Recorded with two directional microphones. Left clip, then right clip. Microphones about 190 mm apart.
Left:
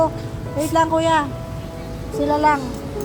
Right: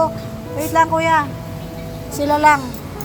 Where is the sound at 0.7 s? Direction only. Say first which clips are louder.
Right 2 dB; 20° left (ahead or behind).